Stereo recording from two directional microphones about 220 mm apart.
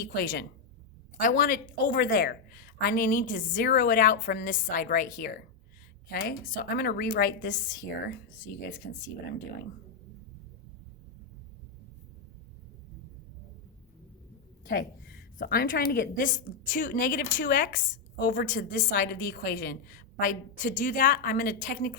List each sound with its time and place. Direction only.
0.2 s a woman's voice: 45° left (ahead or behind)
8.8 s a woman's voice: 50° left (ahead or behind)
14.7 s a woman's voice: 40° left (ahead or behind)